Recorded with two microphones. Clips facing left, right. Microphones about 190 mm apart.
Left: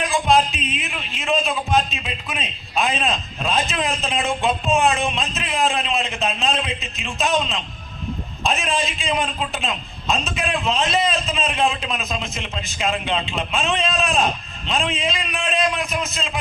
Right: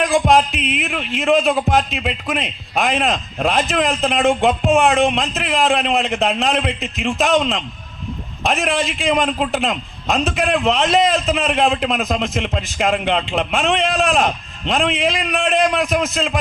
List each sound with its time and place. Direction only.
0.0 s a man's voice: 70° right (ahead or behind)